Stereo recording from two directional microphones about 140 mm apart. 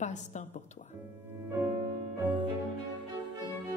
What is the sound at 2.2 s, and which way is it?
Cello, 30° right (ahead or behind).